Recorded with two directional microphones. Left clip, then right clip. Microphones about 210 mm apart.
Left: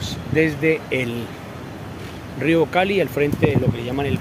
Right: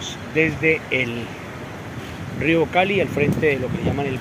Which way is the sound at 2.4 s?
15° left (ahead or behind).